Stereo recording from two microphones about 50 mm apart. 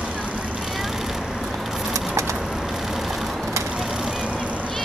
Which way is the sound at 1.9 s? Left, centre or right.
Right.